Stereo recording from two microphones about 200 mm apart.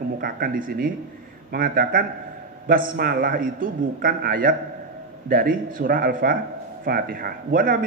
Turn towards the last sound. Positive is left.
turn(degrees=-45)  # may be behind; listen again after turning